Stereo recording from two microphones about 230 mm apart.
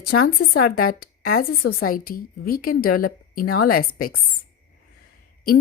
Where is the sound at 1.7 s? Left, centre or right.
Left.